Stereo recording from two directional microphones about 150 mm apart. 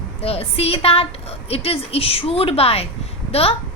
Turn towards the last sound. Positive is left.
turn(degrees=40)  # may be behind; listen again after turning